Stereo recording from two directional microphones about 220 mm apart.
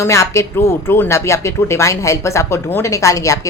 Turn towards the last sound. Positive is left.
turn(degrees=15)  # may be behind; listen again after turning